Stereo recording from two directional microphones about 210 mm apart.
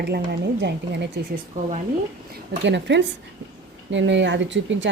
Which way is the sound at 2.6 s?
55° right (ahead or behind).